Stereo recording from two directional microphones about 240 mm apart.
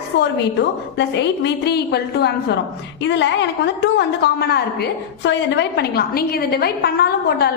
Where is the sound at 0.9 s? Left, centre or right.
Left.